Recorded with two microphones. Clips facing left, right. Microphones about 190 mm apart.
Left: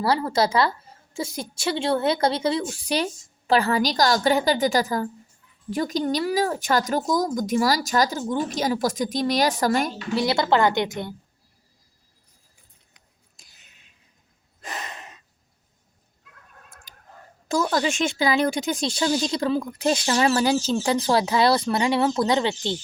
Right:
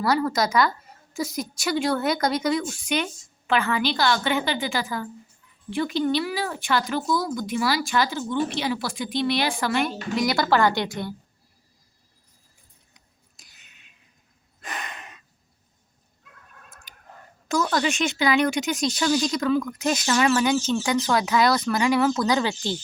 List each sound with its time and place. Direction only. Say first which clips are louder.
0.0 s a woman's voice: left 1 dB; 30° left (ahead or behind)
10.2 s a woman's voice: left 1 dB; 25° left (ahead or behind)
14.6 s gasp: left 1 dB; 25° left (ahead or behind)
17.7 s a woman's voice: left 1 dB; 25° left (ahead or behind)